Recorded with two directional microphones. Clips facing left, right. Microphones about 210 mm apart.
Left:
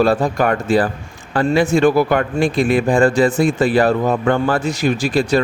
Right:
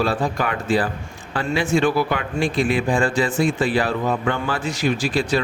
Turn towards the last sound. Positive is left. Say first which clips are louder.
# left 4 dB
turn(degrees=45)  # may be behind; listen again after turning